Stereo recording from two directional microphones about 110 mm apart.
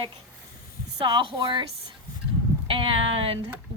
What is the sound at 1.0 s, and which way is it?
Speech, 45° right (ahead or behind).